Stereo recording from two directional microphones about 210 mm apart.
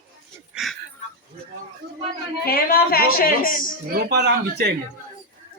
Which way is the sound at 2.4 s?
45° left (ahead or behind).